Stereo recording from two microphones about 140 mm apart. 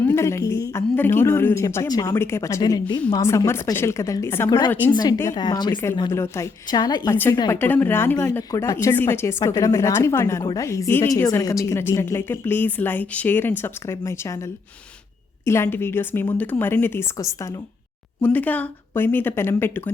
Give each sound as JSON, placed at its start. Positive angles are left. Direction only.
{"t": 0.0, "sound": "speech", "side_deg": 20}
{"t": 4.9, "sound": "speech", "side_deg": 30}
{"t": 5.1, "sound": "speech", "side_deg": 20}
{"t": 5.4, "sound": "speech", "side_deg": 30}
{"t": 6.0, "sound": "speech", "side_deg": 20}
{"t": 7.5, "sound": "speech", "side_deg": 15}
{"t": 15.4, "sound": "a woman's voice", "side_deg": 20}